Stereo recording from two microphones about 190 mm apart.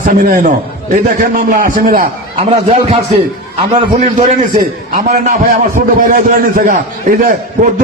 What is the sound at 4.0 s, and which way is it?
A man's voice, 40° right (ahead or behind).